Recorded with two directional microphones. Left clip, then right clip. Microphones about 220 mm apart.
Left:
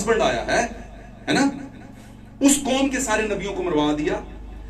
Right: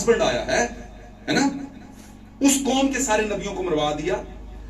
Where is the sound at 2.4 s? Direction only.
20° left (ahead or behind).